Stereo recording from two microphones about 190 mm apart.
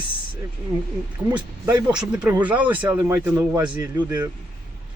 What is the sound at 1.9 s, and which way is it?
Speech, 5° right (ahead or behind).